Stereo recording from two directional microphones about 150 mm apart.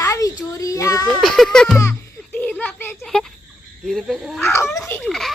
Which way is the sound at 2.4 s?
10° left (ahead or behind).